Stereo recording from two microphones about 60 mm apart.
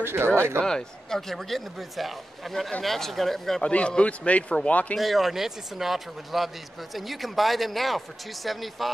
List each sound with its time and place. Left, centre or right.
0.0 s speech: right
0.6 s a man's voice: centre
3.6 s a man's voice: centre
4.9 s a man's voice: centre